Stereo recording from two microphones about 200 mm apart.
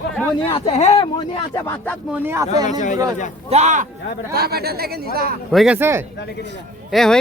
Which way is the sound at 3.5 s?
35° right (ahead or behind).